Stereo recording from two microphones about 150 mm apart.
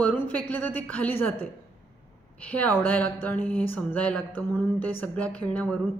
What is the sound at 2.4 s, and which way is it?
Speech, 10° left (ahead or behind).